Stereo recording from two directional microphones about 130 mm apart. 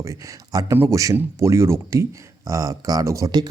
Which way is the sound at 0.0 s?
25° right (ahead or behind).